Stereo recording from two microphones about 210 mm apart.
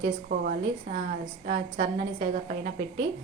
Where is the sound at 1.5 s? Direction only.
45° right (ahead or behind).